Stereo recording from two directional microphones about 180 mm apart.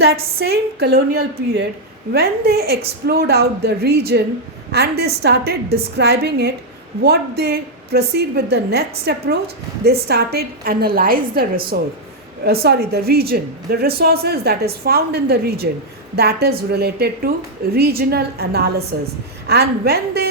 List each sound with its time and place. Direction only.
0.0 s a woman's voice: 60° right (ahead or behind)